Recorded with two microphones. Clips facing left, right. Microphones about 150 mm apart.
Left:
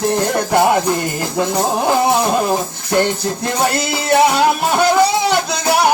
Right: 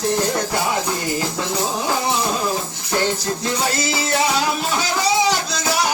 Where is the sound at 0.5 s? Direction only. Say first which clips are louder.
Left 9 dB; 55° left (ahead or behind).